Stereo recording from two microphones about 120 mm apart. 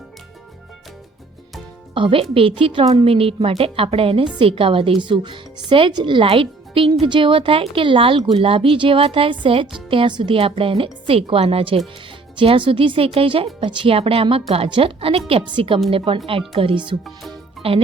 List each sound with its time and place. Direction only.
2.0 s speech: 45° right (ahead or behind)